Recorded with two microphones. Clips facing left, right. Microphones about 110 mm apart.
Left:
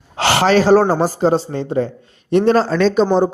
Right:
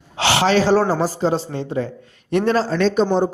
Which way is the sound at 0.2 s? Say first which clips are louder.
Left 3 dB; 45° left (ahead or behind).